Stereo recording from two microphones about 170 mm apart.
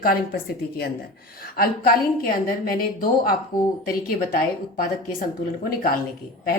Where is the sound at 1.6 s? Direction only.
60° left (ahead or behind).